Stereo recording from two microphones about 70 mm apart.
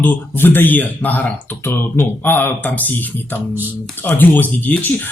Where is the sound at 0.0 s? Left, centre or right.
Left.